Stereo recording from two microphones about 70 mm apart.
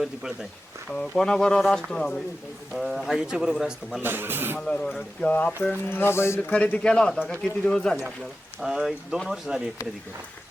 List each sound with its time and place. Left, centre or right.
0.0 s speech: centre
0.9 s speech: centre
2.7 s speech: centre
4.0 s speech: right
4.6 s speech: centre
5.9 s mantra: left
6.5 s speech: centre
8.6 s speech: centre